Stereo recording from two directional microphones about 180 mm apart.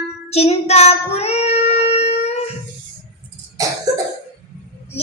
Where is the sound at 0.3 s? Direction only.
35° left (ahead or behind).